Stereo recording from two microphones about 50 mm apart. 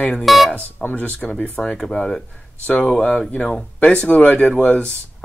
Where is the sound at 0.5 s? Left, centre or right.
Left.